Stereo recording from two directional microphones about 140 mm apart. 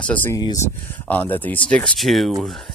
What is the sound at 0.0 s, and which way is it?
Speech, 10° left (ahead or behind).